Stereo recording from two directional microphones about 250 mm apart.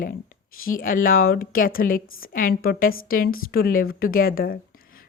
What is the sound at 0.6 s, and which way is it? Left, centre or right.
Speech, left.